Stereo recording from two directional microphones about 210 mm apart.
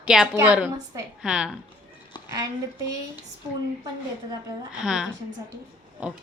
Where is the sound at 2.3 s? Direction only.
15° right (ahead or behind).